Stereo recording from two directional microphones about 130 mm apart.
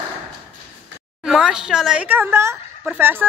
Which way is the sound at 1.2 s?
5° right (ahead or behind).